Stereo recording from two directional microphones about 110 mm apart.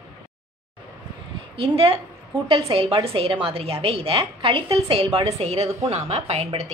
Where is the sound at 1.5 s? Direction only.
60° right (ahead or behind).